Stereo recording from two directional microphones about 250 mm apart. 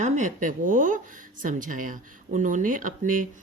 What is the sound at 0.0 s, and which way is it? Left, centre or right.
Speech, right.